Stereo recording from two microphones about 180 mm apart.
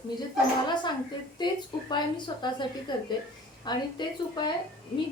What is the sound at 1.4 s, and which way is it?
A woman's voice, 25° left (ahead or behind).